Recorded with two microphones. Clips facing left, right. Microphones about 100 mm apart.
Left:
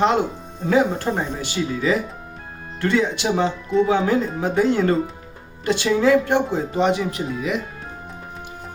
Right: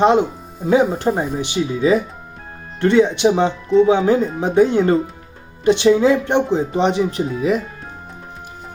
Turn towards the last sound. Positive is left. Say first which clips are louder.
# right 6 dB
turn(degrees=-35)  # may be behind; listen again after turning